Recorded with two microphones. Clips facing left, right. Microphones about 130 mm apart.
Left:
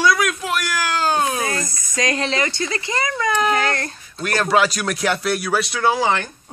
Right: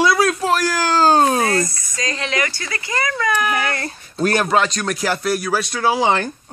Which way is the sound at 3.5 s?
5° right (ahead or behind).